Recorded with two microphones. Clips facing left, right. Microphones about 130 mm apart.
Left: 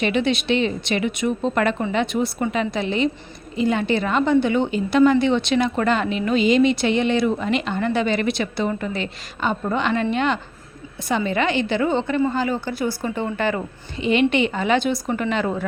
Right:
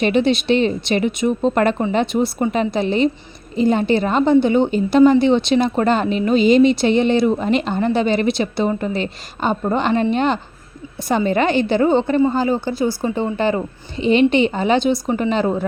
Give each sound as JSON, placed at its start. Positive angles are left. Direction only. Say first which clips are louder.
{"t": 0.0, "sound": "speech", "louder": "right 4 dB", "side_deg": -35}